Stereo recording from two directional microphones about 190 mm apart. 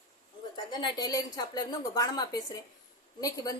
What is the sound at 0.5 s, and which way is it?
A woman's voice, 25° left (ahead or behind).